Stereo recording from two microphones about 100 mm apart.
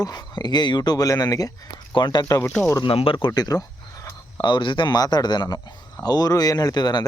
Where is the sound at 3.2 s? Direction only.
40° left (ahead or behind).